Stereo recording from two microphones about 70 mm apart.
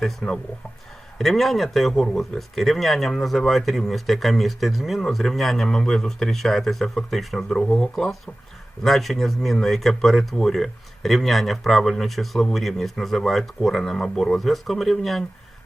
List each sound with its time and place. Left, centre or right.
0.0 s speech: centre